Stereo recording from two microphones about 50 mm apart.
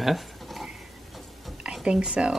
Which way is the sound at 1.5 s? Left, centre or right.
Centre.